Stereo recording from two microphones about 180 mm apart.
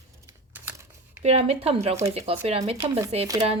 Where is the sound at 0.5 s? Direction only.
10° right (ahead or behind).